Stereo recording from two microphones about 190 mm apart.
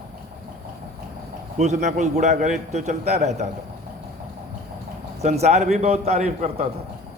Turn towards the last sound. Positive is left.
turn(degrees=-35)  # may be behind; listen again after turning